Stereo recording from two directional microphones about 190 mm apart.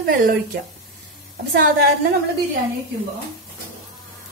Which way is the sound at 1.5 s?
55° right (ahead or behind).